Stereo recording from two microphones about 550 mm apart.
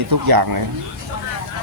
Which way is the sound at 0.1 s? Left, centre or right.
Right.